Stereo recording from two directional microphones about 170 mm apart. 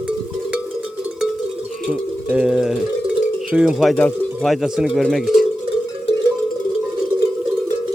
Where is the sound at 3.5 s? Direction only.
5° right (ahead or behind).